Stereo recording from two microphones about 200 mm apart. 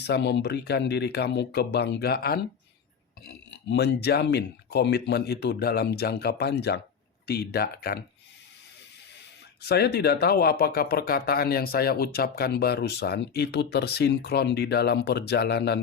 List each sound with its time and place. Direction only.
0.0 s speech: 60° left (ahead or behind)
3.5 s speech: 60° left (ahead or behind)
9.6 s speech: 55° left (ahead or behind)